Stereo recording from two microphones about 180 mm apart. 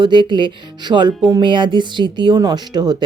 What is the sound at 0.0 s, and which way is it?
Speech, 25° right (ahead or behind).